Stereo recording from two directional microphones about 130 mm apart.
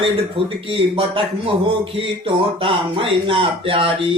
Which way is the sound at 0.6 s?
40° right (ahead or behind).